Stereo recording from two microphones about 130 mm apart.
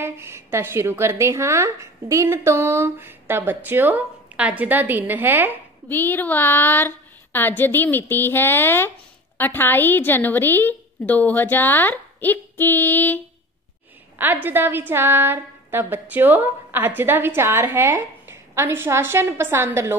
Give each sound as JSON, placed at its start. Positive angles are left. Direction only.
{"t": 0.0, "sound": "a woman's voice", "side_deg": -20}
{"t": 5.9, "sound": "a woman's voice", "side_deg": 15}
{"t": 14.1, "sound": "a woman's voice", "side_deg": -15}